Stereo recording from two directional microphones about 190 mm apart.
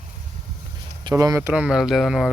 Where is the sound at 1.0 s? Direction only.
20° right (ahead or behind); by 2.3 s centre (ahead or behind).